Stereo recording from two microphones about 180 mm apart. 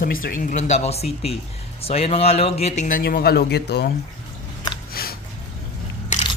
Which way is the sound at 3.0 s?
60° left (ahead or behind).